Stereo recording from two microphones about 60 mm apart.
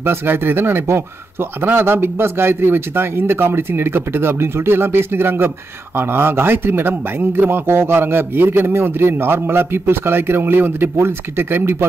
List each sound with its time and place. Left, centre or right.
0.0 s a man's voice: right